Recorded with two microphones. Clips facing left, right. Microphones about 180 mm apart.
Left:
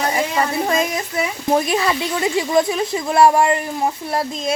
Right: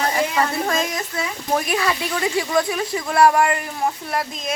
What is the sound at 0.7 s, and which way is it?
Speech, 20° left (ahead or behind).